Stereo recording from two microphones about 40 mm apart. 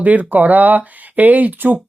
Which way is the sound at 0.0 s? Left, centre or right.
Right.